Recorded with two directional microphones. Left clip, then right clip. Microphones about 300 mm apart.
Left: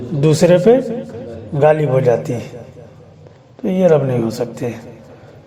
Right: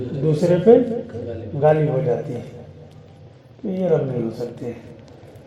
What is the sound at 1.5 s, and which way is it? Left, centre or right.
Speech, left.